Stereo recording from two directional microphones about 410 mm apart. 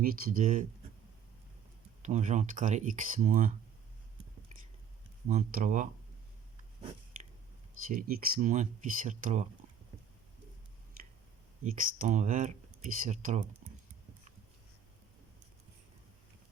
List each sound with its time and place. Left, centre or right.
0.0 s speech: right
2.0 s speech: centre
5.3 s speech: centre
7.9 s speech: right
11.6 s speech: centre
13.6 s typing: centre